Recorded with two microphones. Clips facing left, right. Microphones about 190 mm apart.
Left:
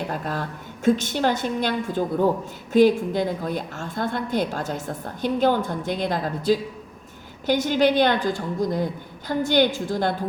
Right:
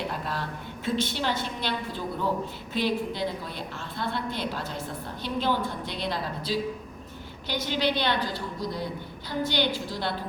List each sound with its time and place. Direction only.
0.1 s a woman's voice: 45° left (ahead or behind)